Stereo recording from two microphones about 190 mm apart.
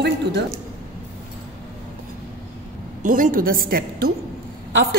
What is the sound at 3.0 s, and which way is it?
A woman's voice, 45° right (ahead or behind).